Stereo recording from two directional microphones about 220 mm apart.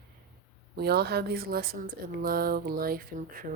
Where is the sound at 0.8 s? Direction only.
45° right (ahead or behind).